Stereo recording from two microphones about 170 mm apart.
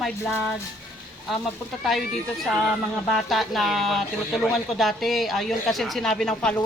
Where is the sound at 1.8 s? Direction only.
Centre (ahead or behind).